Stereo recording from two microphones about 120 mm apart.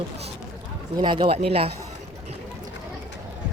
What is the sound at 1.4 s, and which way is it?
Speech, 55° right (ahead or behind).